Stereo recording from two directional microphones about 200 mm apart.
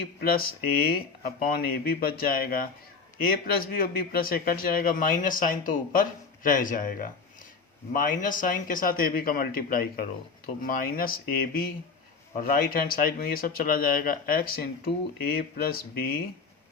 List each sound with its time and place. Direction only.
0.2 s a man's voice: 50° left (ahead or behind)